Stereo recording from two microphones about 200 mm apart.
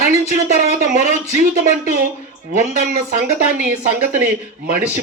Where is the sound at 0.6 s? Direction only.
40° right (ahead or behind).